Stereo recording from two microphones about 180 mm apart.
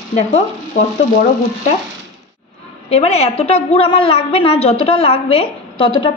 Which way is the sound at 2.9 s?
35° left (ahead or behind).